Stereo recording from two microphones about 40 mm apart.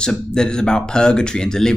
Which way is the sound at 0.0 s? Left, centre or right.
Centre.